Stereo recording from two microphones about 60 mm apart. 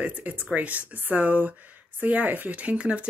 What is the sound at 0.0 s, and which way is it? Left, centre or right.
Speech, right.